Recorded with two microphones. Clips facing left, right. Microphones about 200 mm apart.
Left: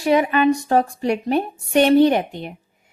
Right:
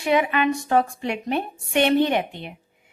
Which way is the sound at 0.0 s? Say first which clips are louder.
Left 4 dB; 40° left (ahead or behind).